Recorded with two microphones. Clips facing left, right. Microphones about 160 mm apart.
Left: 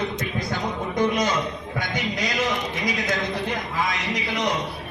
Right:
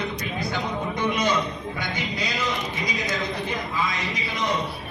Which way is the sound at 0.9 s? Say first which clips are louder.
Left 4 dB; 45° left (ahead or behind).